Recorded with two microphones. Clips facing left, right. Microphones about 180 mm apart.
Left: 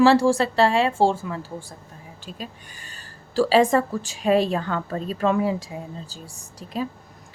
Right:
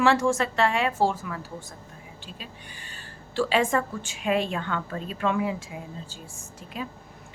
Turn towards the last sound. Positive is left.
turn(degrees=35)  # may be behind; listen again after turning